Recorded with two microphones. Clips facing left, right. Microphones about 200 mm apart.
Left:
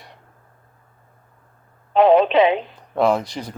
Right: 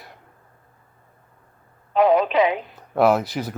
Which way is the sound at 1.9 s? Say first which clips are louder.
Left 3 dB; 30° left (ahead or behind).